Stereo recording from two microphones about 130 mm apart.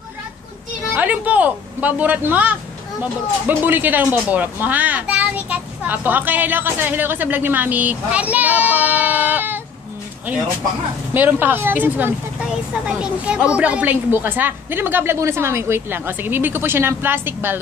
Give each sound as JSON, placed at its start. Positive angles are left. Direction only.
{"t": 0.9, "sound": "speech", "side_deg": -10}
{"t": 11.1, "sound": "speech", "side_deg": -15}